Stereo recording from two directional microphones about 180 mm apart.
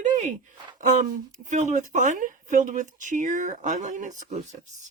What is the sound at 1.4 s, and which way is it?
Speech, 40° right (ahead or behind).